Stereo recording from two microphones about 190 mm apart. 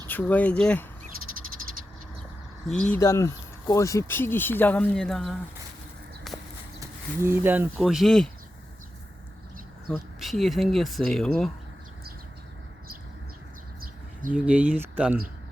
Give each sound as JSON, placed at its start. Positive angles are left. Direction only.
{"t": 0.1, "sound": "speech", "side_deg": 10}
{"t": 2.6, "sound": "speech", "side_deg": 5}
{"t": 3.0, "sound": "speech", "side_deg": 15}
{"t": 6.3, "sound": "horse", "side_deg": 0}
{"t": 6.7, "sound": "speech", "side_deg": -10}
{"t": 9.9, "sound": "speech", "side_deg": 0}
{"t": 14.3, "sound": "speech", "side_deg": -5}